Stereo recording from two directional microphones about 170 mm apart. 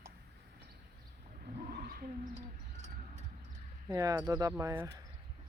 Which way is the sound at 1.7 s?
65° right (ahead or behind).